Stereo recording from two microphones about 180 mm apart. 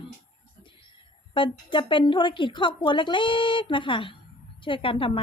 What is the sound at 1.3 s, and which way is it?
A woman's voice, 25° left (ahead or behind).